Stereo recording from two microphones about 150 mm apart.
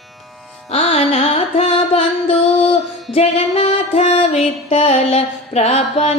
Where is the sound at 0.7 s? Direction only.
45° left (ahead or behind).